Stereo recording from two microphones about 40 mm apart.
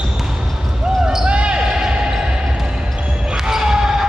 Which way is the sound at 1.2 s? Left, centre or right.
Right.